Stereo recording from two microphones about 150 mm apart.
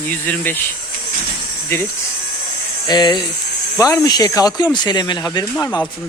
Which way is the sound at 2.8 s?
25° left (ahead or behind).